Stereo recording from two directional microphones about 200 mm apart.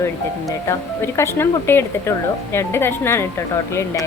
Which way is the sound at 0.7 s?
15° left (ahead or behind).